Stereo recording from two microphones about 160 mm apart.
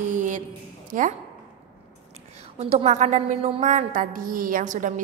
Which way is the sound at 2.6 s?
40° right (ahead or behind).